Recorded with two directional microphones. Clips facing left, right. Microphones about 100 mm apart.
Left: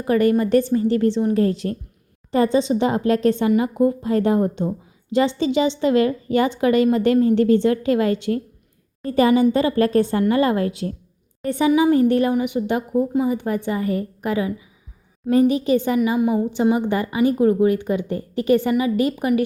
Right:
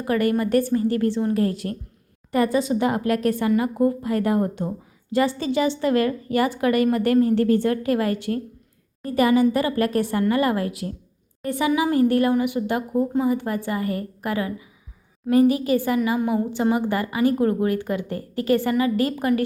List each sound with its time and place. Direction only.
0.1 s a woman's voice: 25° left (ahead or behind)